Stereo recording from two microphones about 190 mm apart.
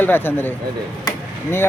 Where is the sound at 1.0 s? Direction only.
15° left (ahead or behind).